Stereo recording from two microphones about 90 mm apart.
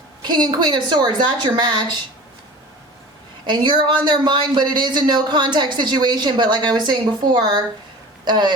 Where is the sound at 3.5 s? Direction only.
60° right (ahead or behind).